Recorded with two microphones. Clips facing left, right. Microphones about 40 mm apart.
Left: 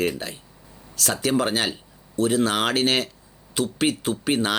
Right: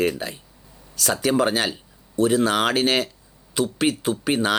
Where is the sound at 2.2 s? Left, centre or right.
Right.